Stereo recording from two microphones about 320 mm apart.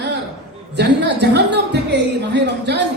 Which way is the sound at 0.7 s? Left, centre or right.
Right.